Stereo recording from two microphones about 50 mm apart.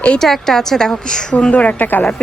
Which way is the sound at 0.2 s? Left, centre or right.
Centre.